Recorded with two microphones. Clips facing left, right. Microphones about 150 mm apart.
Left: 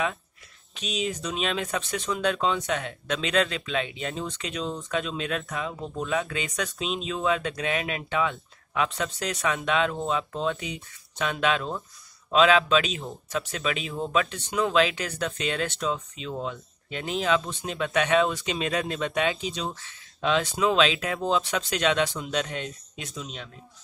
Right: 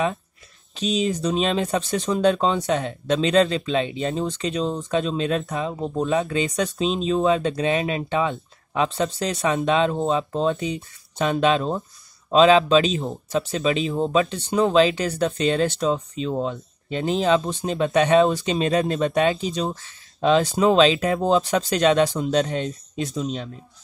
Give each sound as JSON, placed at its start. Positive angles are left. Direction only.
{"t": 0.7, "sound": "speech", "side_deg": -35}